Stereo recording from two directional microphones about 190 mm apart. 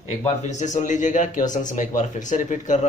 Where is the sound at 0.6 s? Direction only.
40° left (ahead or behind).